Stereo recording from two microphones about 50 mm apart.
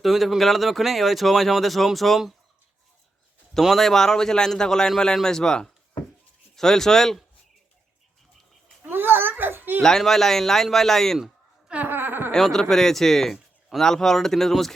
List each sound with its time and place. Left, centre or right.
0.0 s speech: centre
3.6 s a man's voice: centre
8.8 s a sound: right
9.8 s a man's voice: centre
11.9 s a sound: right
12.3 s a man's voice: centre